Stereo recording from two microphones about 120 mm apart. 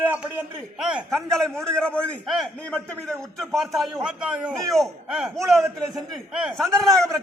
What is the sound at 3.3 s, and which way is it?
A man's voice, centre (ahead or behind).